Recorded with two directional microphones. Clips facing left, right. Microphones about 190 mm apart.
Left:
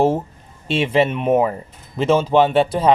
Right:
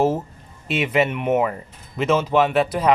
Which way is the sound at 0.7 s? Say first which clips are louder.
Left 3 dB; 30° left (ahead or behind).